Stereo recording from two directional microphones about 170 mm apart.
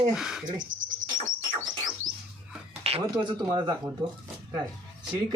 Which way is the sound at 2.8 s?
40° right (ahead or behind).